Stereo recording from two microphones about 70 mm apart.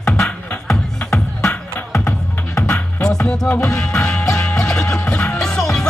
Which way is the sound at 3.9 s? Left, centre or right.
Centre.